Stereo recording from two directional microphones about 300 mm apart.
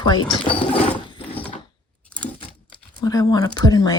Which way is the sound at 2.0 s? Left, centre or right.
Centre.